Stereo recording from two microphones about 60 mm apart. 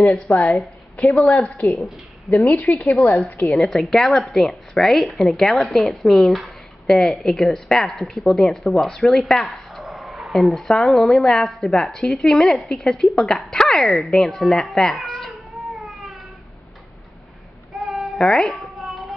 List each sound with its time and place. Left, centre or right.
0.4 s a woman's voice: centre
2.5 s a woman's voice: left
2.9 s a woman's voice: left
3.5 s a woman's voice: centre
9.8 s a sound: centre
10.8 s a woman's voice: centre
14.8 s cat: centre
17.8 s cat: centre